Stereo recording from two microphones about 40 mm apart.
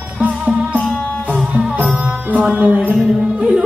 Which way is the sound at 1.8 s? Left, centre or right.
Right.